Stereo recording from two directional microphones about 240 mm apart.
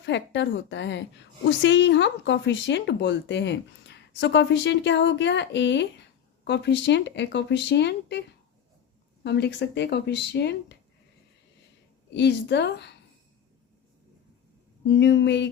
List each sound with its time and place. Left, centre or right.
0.0 s speech: left
9.2 s speech: left
12.1 s speech: left
14.8 s speech: left